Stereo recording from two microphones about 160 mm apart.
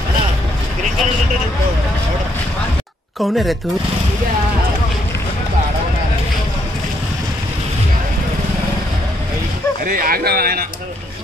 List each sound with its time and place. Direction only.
3.2 s speech: centre (ahead or behind)
9.8 s speech: 65° right (ahead or behind)